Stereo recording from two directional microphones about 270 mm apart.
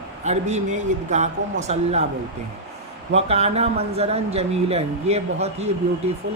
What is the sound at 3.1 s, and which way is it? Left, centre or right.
Speech, right.